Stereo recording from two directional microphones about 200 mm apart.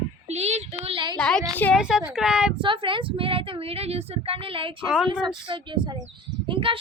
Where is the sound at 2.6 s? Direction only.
25° right (ahead or behind).